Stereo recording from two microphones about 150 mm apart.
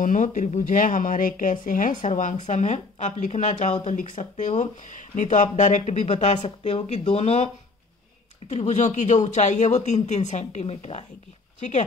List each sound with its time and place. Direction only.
0.0 s speech: 60° left (ahead or behind)